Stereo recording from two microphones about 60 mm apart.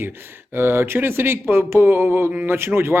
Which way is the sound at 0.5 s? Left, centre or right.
Right.